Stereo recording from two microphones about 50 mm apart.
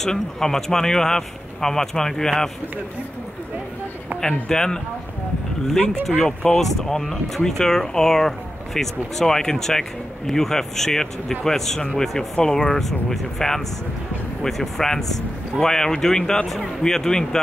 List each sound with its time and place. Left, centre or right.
0.0 s speech: centre
4.5 s speech: centre
6.2 s speech: centre